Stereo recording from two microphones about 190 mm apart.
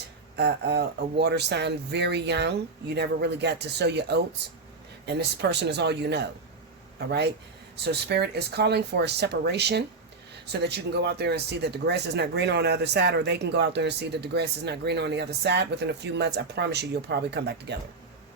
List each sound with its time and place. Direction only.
0.3 s speech: 60° right (ahead or behind)
7.8 s speech: 60° right (ahead or behind)